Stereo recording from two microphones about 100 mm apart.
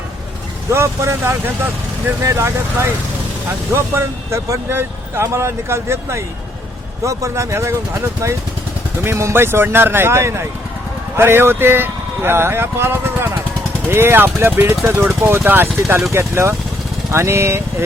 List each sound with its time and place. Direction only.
0.7 s speech: 25° right (ahead or behind)